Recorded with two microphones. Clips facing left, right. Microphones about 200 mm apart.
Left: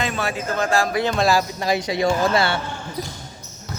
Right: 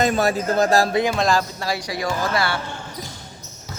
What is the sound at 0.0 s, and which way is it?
Speech, 40° right (ahead or behind).